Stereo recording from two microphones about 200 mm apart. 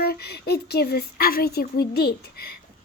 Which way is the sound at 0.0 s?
55° left (ahead or behind).